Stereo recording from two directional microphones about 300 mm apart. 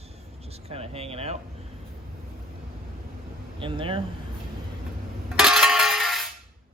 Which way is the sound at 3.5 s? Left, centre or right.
Centre.